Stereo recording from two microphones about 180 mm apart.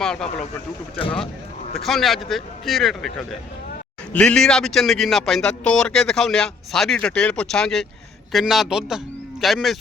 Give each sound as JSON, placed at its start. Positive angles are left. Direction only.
{"t": 0.0, "sound": "a man's voice", "side_deg": 5}
{"t": 0.9, "sound": "speech", "side_deg": 30}
{"t": 1.7, "sound": "a man's voice", "side_deg": 0}